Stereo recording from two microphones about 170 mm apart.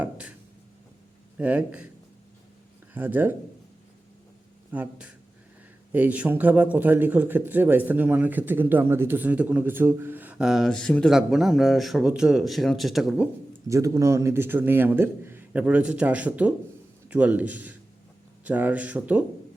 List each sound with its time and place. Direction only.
0.0 s a sound: 5° right (ahead or behind)
1.4 s a man's voice: 10° right (ahead or behind)
2.9 s speech: 10° right (ahead or behind)
4.7 s a man's voice: 10° right (ahead or behind)
13.7 s a man's voice: 20° right (ahead or behind)